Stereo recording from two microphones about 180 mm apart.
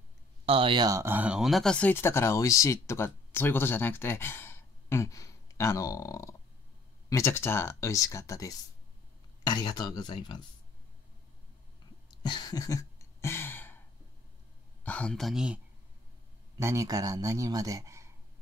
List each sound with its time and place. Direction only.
0.5 s speech: 30° right (ahead or behind); by 10.4 s 25° left (ahead or behind)
12.1 s a sound: 25° left (ahead or behind)
14.8 s speech: 5° left (ahead or behind)
16.5 s speech: 15° right (ahead or behind)